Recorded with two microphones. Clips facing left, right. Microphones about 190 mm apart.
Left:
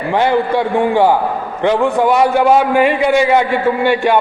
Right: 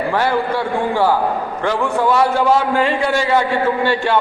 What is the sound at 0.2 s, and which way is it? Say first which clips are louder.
A man's voice: left 7 dB; 20° left (ahead or behind).